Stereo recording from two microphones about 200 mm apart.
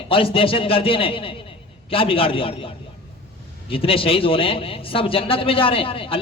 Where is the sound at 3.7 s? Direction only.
25° left (ahead or behind).